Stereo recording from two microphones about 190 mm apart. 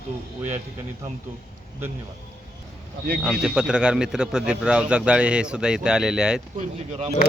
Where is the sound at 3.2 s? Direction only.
5° right (ahead or behind).